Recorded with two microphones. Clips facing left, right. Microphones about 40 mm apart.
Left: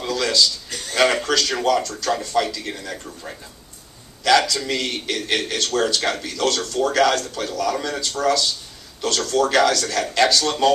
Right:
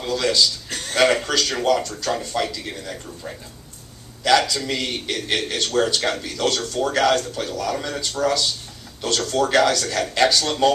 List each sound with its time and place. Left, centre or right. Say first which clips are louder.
0.0 s a sound: even; centre
0.9 s a man's voice: even; centre
1.8 s speech: left 2 dB; centre
2.0 s a man's voice: left 3 dB; centre
4.2 s a man's voice: left 1 dB; centre